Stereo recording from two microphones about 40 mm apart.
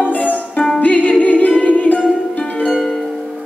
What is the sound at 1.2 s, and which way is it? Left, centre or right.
A capella, left.